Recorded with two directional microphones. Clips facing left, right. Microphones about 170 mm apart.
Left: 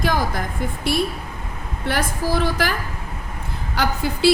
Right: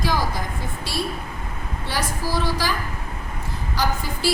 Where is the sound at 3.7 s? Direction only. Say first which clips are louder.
Left 3 dB; 60° left (ahead or behind).